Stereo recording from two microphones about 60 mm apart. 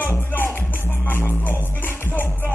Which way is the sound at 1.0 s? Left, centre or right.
Left.